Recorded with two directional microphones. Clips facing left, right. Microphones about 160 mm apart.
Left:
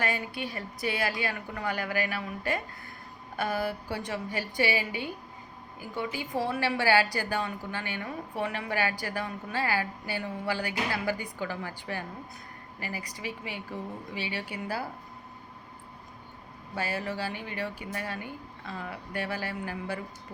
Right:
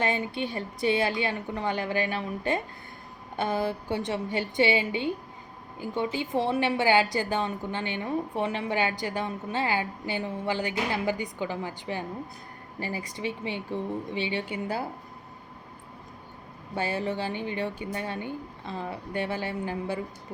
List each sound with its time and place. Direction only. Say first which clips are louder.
0.0 s a woman's voice: right 4 dB; 25° right (ahead or behind)
16.7 s a woman's voice: right 4 dB; 25° right (ahead or behind)